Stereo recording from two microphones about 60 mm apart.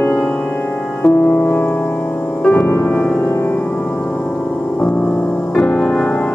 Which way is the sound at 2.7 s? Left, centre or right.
Left.